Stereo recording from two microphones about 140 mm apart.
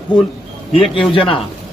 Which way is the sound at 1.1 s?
40° left (ahead or behind).